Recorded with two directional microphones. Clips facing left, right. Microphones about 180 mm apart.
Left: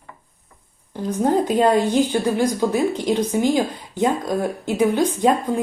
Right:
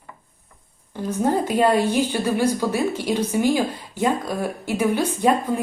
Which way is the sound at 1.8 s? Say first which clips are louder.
Left 2 dB; 15° left (ahead or behind).